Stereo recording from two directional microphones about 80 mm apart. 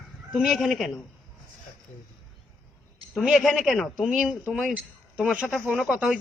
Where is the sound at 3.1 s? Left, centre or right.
Centre.